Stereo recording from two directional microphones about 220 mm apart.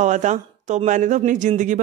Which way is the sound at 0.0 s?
35° right (ahead or behind).